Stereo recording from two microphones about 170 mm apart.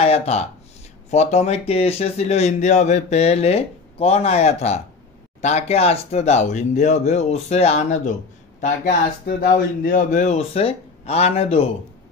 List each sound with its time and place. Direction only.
0.0 s speech: 40° left (ahead or behind)